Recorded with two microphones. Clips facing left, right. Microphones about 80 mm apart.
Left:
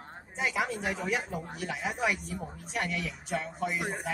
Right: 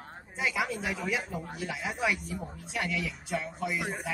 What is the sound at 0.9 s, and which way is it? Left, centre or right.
Speech, left.